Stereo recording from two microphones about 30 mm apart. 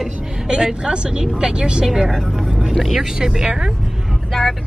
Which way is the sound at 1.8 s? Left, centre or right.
Centre.